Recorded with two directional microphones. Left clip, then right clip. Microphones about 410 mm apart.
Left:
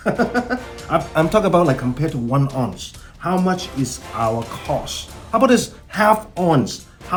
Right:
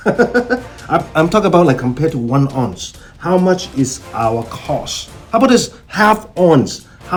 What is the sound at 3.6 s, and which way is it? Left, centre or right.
Speech, centre.